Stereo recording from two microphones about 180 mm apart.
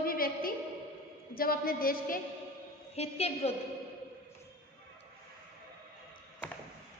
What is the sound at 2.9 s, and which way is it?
Speech, 35° left (ahead or behind).